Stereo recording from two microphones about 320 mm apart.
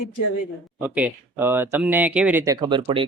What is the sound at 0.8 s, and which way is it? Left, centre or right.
Speech, centre.